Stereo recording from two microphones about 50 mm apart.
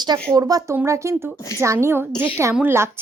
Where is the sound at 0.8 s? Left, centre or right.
Right.